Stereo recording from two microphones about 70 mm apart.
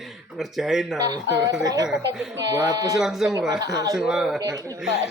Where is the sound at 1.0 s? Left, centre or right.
Right.